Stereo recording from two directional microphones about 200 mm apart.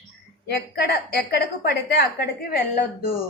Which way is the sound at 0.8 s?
55° left (ahead or behind).